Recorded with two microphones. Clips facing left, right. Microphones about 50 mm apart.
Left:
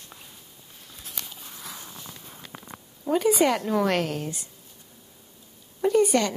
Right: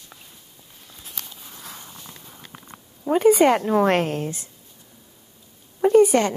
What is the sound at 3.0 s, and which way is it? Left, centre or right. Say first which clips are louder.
A woman's voice: right 6 dB; right.